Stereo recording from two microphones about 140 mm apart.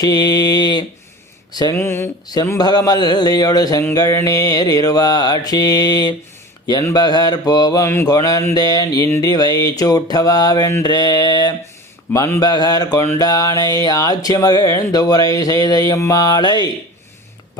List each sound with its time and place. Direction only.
0.0 s speech: 30° left (ahead or behind)
1.7 s speech: 15° left (ahead or behind)
2.2 s speech: 30° left (ahead or behind)